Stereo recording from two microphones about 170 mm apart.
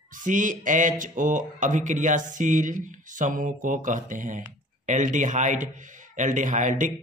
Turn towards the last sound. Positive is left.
turn(degrees=-50)  # may be behind; listen again after turning